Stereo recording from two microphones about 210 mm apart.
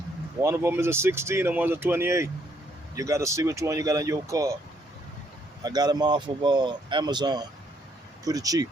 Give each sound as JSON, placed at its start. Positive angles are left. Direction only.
{"t": 0.4, "sound": "speech", "side_deg": -15}
{"t": 5.6, "sound": "speech", "side_deg": -20}